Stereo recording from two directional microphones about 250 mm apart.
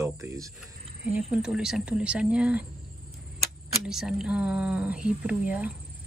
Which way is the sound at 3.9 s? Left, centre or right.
Centre.